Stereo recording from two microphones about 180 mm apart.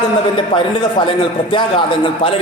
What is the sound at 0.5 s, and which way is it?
A man's voice, 25° left (ahead or behind).